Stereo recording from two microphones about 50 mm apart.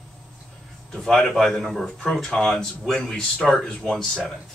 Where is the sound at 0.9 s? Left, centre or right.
Centre.